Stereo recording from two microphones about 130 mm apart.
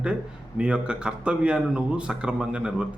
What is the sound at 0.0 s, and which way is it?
A man's voice, 10° right (ahead or behind).